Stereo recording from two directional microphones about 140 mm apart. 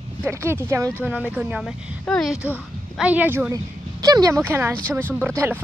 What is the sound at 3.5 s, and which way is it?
Speech, 25° right (ahead or behind).